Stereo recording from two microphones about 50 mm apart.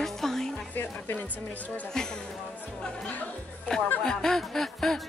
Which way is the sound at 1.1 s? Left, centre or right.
Left.